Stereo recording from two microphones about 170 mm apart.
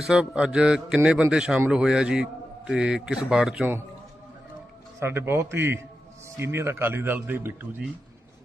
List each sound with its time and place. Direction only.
0.1 s a man's voice: 5° right (ahead or behind)
4.9 s speech: 15° right (ahead or behind)